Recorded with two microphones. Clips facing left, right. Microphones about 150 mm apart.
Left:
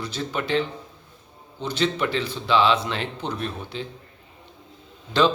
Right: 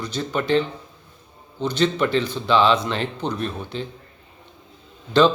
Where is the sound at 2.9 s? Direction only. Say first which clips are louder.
Right 4 dB; 40° right (ahead or behind).